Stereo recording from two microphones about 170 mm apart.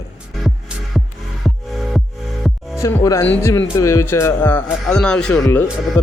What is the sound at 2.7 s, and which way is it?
Speech, 15° left (ahead or behind).